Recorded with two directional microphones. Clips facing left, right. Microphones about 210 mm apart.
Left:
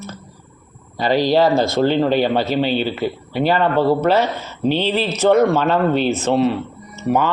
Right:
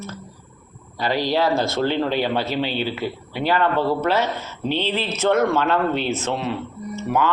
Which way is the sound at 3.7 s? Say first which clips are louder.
Left 5 dB; 40° left (ahead or behind).